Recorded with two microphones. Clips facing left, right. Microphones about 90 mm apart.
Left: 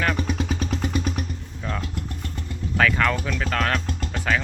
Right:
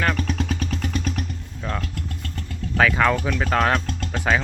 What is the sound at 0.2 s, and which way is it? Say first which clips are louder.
Vehicle: even; 10° left (ahead or behind).